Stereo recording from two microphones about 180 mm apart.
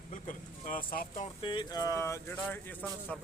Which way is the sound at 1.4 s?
25° left (ahead or behind).